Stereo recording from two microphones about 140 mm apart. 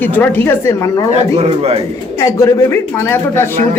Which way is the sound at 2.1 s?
20° left (ahead or behind).